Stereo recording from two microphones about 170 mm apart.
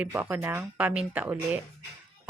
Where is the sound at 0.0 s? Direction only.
10° right (ahead or behind).